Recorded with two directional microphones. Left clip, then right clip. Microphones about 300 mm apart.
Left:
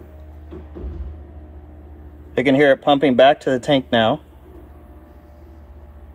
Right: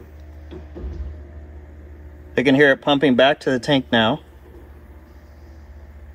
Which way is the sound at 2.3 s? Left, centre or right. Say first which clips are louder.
Even; right.